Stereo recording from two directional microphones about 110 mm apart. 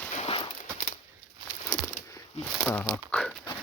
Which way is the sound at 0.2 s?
60° left (ahead or behind).